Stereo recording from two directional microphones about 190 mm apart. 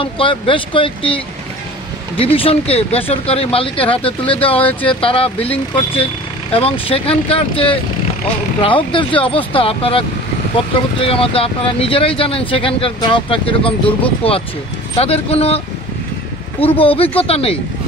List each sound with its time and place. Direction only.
0.0 s speech: 25° left (ahead or behind)